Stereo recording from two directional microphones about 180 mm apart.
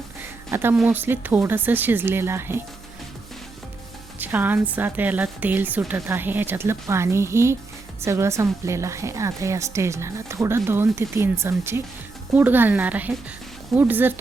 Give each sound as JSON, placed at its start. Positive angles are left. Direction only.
{"t": 0.5, "sound": "a woman's voice", "side_deg": -10}
{"t": 4.2, "sound": "a woman's voice", "side_deg": -10}